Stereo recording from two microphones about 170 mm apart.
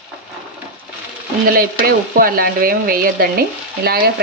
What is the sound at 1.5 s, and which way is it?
Speech, 60° right (ahead or behind).